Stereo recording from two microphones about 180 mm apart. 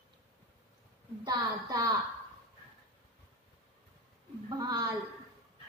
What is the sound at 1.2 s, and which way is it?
Speech, 20° right (ahead or behind).